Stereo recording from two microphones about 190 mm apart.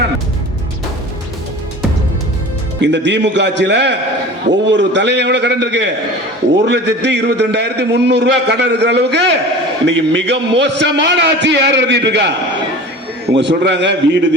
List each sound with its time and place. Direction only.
2.8 s a man's voice: 65° right (ahead or behind)
9.8 s a man's voice: 75° right (ahead or behind)